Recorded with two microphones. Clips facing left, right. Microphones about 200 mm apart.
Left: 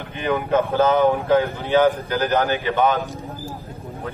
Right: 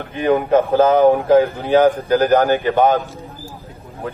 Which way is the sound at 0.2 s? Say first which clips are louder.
Right 5 dB; 50° right (ahead or behind).